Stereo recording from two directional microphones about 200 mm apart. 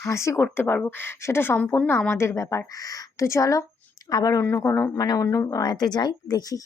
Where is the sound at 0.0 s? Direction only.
15° left (ahead or behind).